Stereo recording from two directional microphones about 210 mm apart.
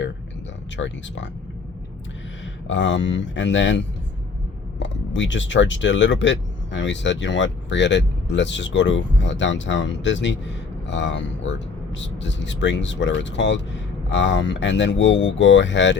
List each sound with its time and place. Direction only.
0.8 s speech: 60° left (ahead or behind)
2.6 s speech: 60° left (ahead or behind)